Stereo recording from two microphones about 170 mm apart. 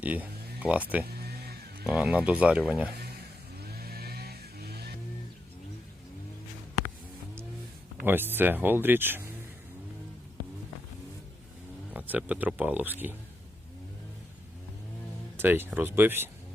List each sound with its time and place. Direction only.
0.0 s speech: 10° right (ahead or behind)
1.2 s music: 65° right (ahead or behind)
1.9 s speech: 5° right (ahead or behind)
3.6 s vehicle: 65° right (ahead or behind)
8.0 s speech: 10° right (ahead or behind)
11.9 s speech: 10° right (ahead or behind)
15.4 s speech: 10° right (ahead or behind)